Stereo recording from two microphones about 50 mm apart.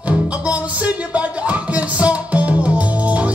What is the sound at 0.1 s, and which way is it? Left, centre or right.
Music, right.